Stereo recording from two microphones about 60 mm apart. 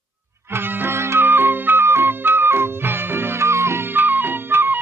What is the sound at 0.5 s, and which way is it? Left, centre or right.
Music, right.